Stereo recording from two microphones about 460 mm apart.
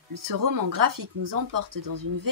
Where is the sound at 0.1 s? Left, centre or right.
Right.